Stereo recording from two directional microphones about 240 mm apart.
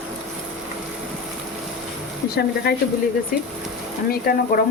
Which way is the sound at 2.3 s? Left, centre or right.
Left.